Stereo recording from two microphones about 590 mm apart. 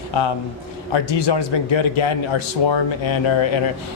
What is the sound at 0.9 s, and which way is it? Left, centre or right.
A man's voice, left.